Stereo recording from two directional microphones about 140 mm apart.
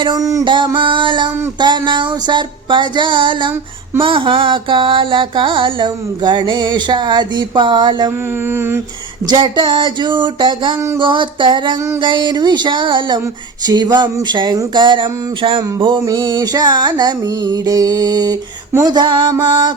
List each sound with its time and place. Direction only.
0.0 s music: 25° right (ahead or behind)
0.4 s music: 35° right (ahead or behind)
9.2 s music: 30° right (ahead or behind)